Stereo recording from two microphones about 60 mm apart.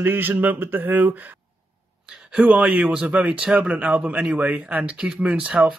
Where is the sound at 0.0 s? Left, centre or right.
Right.